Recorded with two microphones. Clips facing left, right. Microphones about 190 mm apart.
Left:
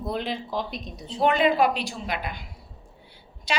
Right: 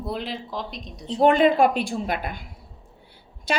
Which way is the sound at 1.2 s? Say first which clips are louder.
Right 4 dB; 45° right (ahead or behind).